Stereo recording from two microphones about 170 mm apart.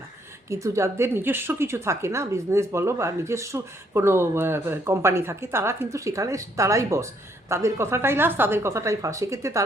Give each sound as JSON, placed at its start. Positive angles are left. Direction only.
{"t": 0.5, "sound": "a woman's voice", "side_deg": -15}